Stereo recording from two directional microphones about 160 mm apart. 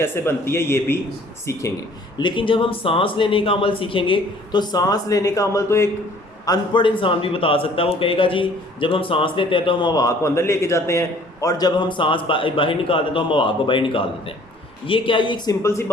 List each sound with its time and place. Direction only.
0.0 s a man's voice: 15° left (ahead or behind)
2.1 s a man's voice: 30° left (ahead or behind)
6.4 s a man's voice: 25° left (ahead or behind)
15.6 s a man's voice: 15° left (ahead or behind)